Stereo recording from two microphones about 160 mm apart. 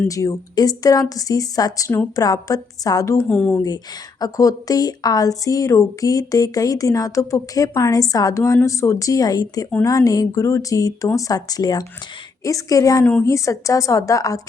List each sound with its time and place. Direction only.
0.1 s speech: 20° left (ahead or behind)
3.2 s speech: 5° left (ahead or behind)
4.2 s speech: 20° left (ahead or behind)